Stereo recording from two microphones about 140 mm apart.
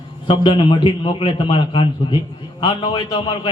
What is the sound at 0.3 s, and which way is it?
A man's voice, 35° left (ahead or behind).